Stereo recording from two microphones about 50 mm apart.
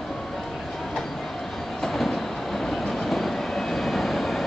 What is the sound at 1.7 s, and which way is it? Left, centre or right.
Train, centre.